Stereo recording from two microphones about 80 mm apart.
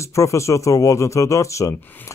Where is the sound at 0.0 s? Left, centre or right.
Left.